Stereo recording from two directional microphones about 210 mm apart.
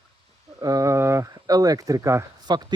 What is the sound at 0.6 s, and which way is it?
Speech, 15° right (ahead or behind).